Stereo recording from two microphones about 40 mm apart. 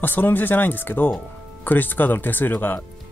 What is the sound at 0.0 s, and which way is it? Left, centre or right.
Speech, left.